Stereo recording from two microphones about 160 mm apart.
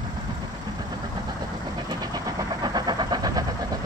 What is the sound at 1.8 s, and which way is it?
Vehicle, 25° right (ahead or behind).